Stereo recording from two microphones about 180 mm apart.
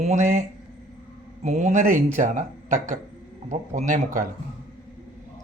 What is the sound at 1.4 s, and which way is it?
Speech, 40° right (ahead or behind).